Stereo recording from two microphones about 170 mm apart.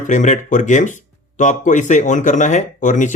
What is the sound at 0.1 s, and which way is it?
Speech, 45° left (ahead or behind).